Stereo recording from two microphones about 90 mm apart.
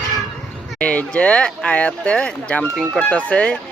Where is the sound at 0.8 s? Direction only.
15° left (ahead or behind).